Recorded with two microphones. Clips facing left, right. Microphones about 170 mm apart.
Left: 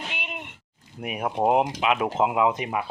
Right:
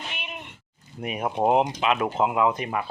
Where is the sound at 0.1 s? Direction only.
15° left (ahead or behind).